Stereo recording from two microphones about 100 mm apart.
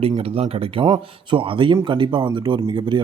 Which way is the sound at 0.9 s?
55° right (ahead or behind).